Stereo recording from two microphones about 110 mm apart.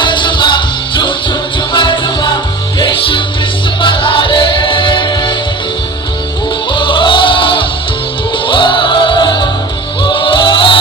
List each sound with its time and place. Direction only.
0.0 s music: 45° left (ahead or behind)
6.7 s music: 50° left (ahead or behind)